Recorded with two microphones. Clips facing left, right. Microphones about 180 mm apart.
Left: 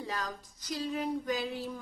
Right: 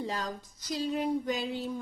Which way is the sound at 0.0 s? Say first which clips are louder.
Right 3 dB; 25° right (ahead or behind).